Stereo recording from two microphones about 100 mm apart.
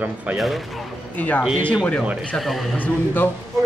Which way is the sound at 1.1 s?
15° left (ahead or behind).